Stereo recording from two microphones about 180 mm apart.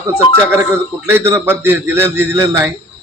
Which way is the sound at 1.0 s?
15° right (ahead or behind).